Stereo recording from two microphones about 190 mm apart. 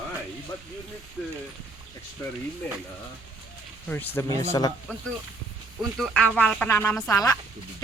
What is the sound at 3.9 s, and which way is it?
Speech, 10° left (ahead or behind).